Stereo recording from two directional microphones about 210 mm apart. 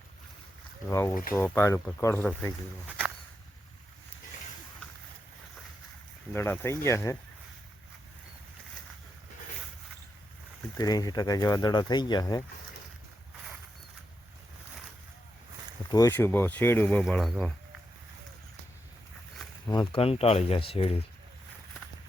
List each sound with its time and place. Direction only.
0.9 s speech: 15° left (ahead or behind)
6.3 s speech: 10° left (ahead or behind)
10.8 s speech: 20° left (ahead or behind)
15.9 s speech: 15° left (ahead or behind)
19.6 s speech: 20° left (ahead or behind)